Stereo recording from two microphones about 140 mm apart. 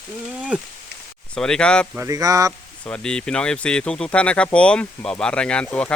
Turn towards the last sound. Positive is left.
turn(degrees=10)  # may be behind; listen again after turning